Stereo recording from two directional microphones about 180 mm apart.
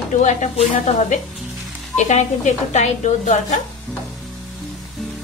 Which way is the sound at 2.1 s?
40° left (ahead or behind).